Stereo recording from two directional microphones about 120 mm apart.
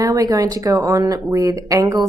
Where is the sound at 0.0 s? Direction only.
30° right (ahead or behind).